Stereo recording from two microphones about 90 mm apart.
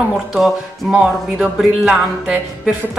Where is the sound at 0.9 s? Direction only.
10° right (ahead or behind).